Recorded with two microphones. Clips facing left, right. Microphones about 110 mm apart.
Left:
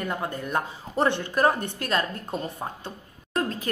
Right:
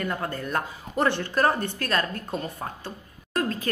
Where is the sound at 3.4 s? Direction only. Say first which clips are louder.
Right 1 dB; 20° left (ahead or behind).